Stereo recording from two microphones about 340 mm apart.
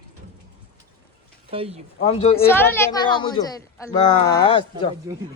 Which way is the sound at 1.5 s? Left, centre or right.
Centre.